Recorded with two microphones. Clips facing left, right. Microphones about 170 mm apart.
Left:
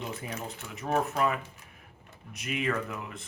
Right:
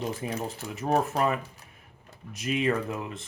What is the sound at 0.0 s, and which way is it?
Speech, 35° right (ahead or behind).